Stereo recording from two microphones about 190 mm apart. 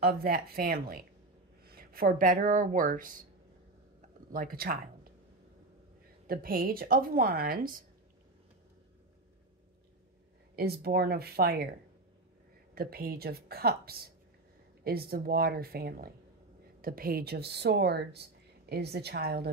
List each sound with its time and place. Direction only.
0.0 s speech: 55° right (ahead or behind)
4.3 s speech: 50° right (ahead or behind)
6.2 s speech: 50° right (ahead or behind)
10.5 s speech: 55° right (ahead or behind)
12.7 s speech: 50° right (ahead or behind)